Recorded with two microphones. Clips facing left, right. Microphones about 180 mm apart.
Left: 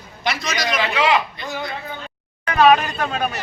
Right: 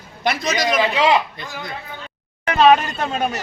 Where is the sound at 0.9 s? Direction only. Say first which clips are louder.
Even; 30° right (ahead or behind).